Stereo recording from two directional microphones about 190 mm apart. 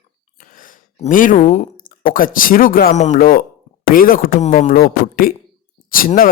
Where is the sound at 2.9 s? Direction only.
35° left (ahead or behind).